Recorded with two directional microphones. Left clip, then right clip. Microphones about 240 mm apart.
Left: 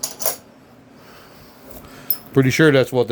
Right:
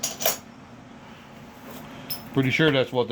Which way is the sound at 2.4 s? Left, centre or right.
Left.